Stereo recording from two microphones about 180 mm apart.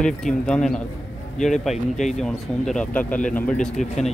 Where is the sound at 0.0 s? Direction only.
5° left (ahead or behind).